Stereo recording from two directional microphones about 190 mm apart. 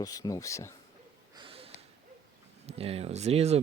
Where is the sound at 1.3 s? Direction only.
30° right (ahead or behind).